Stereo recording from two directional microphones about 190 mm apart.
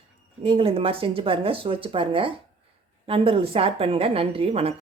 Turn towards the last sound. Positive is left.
turn(degrees=-30)  # may be behind; listen again after turning